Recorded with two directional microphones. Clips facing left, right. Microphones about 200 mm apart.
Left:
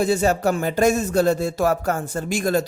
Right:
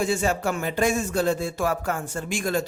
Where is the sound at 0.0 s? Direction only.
40° left (ahead or behind).